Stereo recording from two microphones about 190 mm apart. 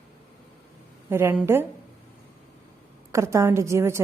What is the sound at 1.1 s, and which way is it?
Speech, 10° right (ahead or behind).